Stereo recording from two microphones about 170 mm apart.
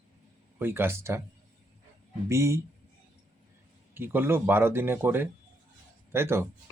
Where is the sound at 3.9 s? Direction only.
10° right (ahead or behind).